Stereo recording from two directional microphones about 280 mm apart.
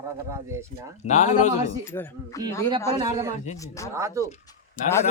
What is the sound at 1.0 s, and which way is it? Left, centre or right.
Speech, left.